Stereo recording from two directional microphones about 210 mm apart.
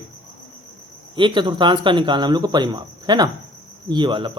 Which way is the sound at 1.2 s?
20° right (ahead or behind).